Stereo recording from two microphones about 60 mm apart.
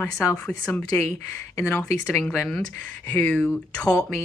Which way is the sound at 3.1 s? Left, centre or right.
Left.